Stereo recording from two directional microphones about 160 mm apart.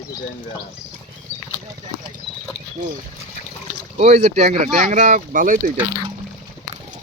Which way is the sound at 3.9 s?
40° right (ahead or behind).